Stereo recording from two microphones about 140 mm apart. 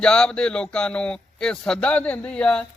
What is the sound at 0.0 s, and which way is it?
Speech, 5° left (ahead or behind).